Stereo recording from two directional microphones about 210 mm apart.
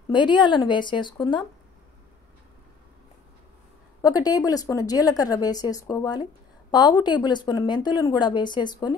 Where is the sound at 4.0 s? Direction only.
15° left (ahead or behind).